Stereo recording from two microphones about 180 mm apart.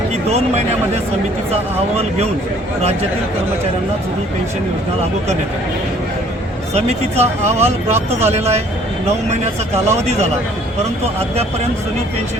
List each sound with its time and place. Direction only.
0.3 s speech: 35° right (ahead or behind)
6.7 s speech: 35° right (ahead or behind)